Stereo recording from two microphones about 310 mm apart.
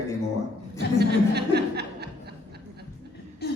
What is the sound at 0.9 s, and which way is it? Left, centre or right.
Chuckle, right.